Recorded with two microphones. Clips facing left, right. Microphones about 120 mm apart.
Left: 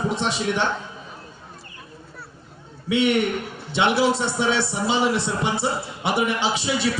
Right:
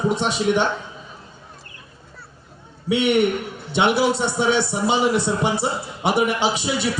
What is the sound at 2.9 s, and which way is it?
Speech, 15° right (ahead or behind).